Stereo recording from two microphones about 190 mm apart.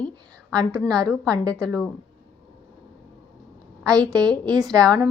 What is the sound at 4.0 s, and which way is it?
Speech, 20° right (ahead or behind).